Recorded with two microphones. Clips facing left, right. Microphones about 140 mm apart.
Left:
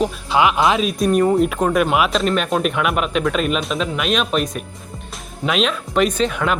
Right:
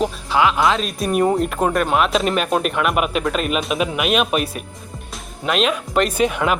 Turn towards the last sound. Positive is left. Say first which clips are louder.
# right 1 dB
turn(degrees=-5)  # may be behind; listen again after turning